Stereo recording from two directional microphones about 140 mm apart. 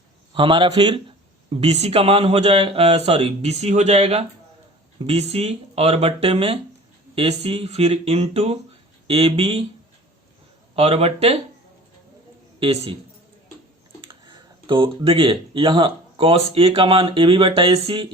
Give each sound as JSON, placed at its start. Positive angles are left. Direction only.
{"t": 0.3, "sound": "a man's voice", "side_deg": -35}
{"t": 1.5, "sound": "a man's voice", "side_deg": -50}
{"t": 10.8, "sound": "a man's voice", "side_deg": -45}
{"t": 12.5, "sound": "a man's voice", "side_deg": -40}
{"t": 14.0, "sound": "speech", "side_deg": -35}